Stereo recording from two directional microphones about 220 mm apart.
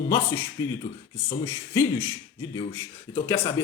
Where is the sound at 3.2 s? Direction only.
10° left (ahead or behind).